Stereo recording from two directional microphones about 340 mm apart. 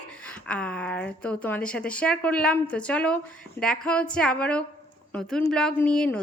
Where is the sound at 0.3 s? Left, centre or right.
Centre.